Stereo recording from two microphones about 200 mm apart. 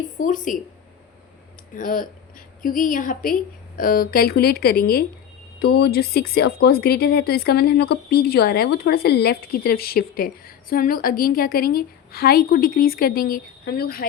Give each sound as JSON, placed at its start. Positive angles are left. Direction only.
{"t": 0.2, "sound": "speech", "side_deg": 40}
{"t": 1.7, "sound": "speech", "side_deg": 45}